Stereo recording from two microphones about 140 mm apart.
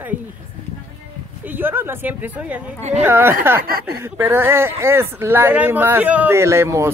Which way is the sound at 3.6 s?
90° right.